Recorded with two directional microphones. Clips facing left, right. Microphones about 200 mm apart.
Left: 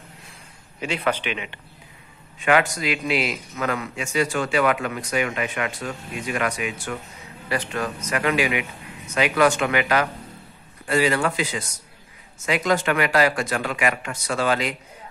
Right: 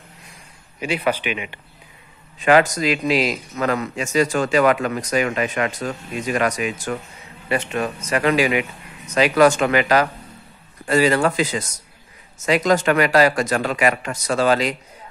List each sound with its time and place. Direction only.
0.7 s a man's voice: 10° right (ahead or behind)
2.3 s a man's voice: 35° right (ahead or behind)
7.4 s a man's voice: 20° right (ahead or behind); by 14.8 s 40° right (ahead or behind)